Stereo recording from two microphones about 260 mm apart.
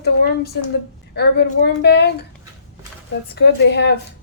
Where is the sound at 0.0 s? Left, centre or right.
Left.